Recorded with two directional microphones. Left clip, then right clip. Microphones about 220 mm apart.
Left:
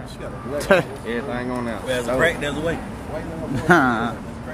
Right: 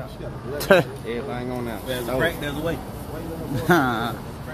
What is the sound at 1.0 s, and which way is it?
Speech, 10° left (ahead or behind).